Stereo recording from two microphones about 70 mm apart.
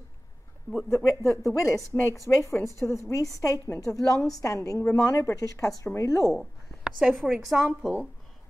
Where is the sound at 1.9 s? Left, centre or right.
Left.